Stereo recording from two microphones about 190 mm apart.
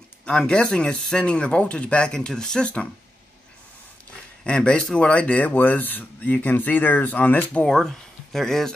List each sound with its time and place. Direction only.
0.2 s speech: 5° left (ahead or behind)
4.5 s speech: 5° left (ahead or behind)